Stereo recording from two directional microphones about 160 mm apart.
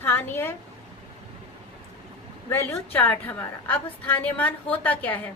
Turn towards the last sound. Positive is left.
turn(degrees=10)  # may be behind; listen again after turning